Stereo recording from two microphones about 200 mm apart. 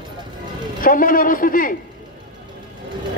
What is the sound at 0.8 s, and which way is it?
Speech, 45° left (ahead or behind).